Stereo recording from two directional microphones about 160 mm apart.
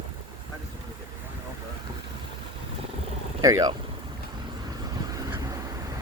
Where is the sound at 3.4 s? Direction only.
20° right (ahead or behind).